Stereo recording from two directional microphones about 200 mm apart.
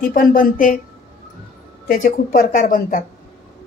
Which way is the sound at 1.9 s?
45° left (ahead or behind).